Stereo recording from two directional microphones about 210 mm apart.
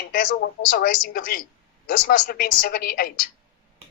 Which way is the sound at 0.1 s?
40° left (ahead or behind).